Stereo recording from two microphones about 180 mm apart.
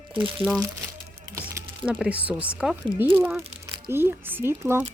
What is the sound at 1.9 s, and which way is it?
Speech, 5° right (ahead or behind).